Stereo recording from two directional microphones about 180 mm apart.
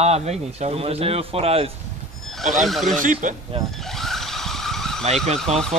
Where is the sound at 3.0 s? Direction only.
45° right (ahead or behind).